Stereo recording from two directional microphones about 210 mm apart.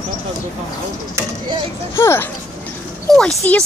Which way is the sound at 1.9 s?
10° left (ahead or behind).